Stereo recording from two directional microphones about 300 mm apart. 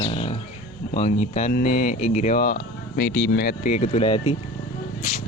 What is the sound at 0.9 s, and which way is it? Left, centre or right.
Speech, left.